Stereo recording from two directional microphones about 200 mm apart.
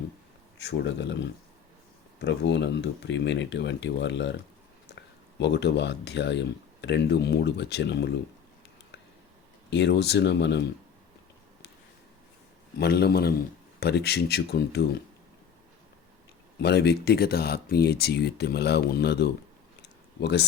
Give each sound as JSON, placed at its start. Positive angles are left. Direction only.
{"t": 0.6, "sound": "speech", "side_deg": 60}
{"t": 9.6, "sound": "speech", "side_deg": 60}
{"t": 12.8, "sound": "speech", "side_deg": 55}
{"t": 16.6, "sound": "speech", "side_deg": 55}